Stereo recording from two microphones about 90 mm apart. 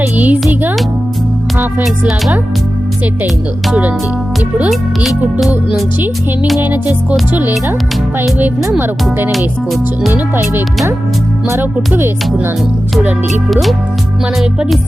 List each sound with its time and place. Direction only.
0.0 s music: 20° right (ahead or behind)
6.6 s music: 20° right (ahead or behind)
8.8 s music: 25° right (ahead or behind)
13.5 s music: centre (ahead or behind)